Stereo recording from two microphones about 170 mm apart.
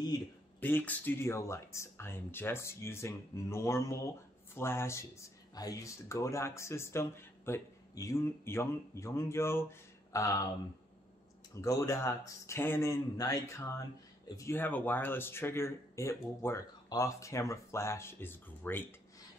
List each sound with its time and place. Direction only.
0.6 s speech: 10° left (ahead or behind)
11.6 s speech: 15° left (ahead or behind)